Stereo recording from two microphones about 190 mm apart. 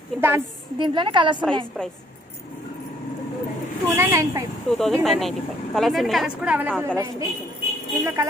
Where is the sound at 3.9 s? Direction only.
15° right (ahead or behind).